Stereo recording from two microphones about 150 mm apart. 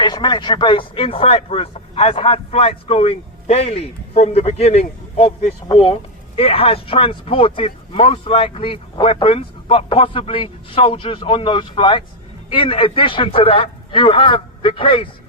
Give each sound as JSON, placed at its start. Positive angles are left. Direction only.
{"t": 0.0, "sound": "speech", "side_deg": 30}